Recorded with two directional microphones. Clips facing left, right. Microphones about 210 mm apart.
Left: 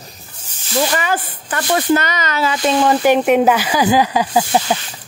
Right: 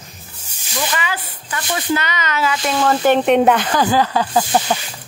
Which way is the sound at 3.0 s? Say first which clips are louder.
Right 2 dB; 10° left (ahead or behind).